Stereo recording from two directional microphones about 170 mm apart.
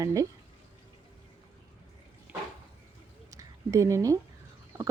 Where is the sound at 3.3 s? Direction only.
20° right (ahead or behind).